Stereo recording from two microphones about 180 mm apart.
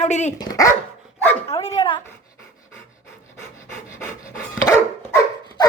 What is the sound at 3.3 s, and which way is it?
Pant, 15° left (ahead or behind).